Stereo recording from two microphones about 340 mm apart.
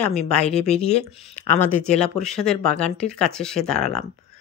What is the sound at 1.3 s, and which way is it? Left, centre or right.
Speech, centre.